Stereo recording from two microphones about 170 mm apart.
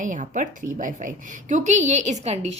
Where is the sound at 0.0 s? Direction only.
50° right (ahead or behind).